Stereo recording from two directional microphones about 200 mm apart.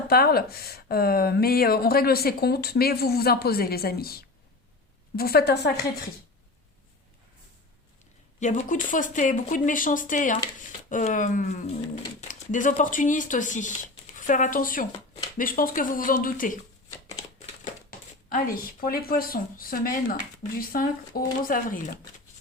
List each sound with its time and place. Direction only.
0.1 s speech: 50° left (ahead or behind)
8.4 s speech: 35° left (ahead or behind)
18.3 s speech: 45° left (ahead or behind)